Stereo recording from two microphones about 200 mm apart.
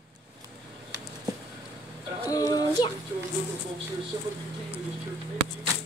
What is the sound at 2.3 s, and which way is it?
Female singing, 15° left (ahead or behind).